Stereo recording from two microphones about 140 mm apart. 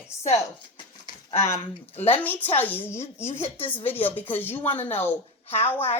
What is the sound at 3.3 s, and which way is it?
Speech, 50° left (ahead or behind).